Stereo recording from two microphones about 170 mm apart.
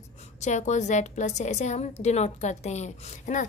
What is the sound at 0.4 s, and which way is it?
A woman's voice, 45° left (ahead or behind).